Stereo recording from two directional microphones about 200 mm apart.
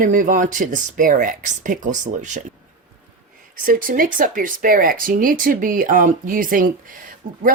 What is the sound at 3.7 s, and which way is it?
Speech, 45° right (ahead or behind).